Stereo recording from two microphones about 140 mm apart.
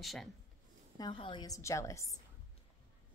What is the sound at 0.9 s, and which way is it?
Speech, 35° left (ahead or behind).